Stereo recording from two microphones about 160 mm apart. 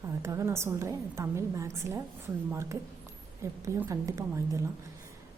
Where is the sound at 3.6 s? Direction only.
20° right (ahead or behind).